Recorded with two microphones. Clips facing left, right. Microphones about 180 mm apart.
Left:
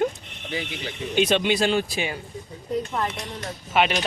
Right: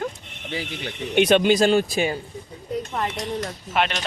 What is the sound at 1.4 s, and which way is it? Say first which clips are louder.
Speech: right 4 dB; 40° right (ahead or behind).